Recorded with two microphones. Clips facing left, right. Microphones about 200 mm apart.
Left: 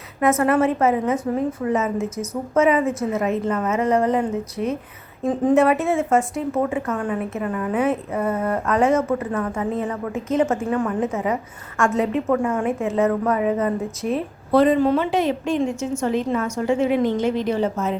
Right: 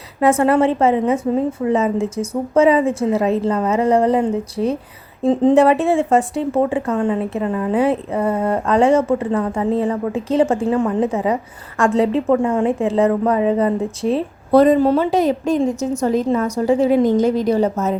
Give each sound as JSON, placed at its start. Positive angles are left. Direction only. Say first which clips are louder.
{"t": 0.2, "sound": "a woman's voice", "louder": "right 4 dB", "side_deg": -30}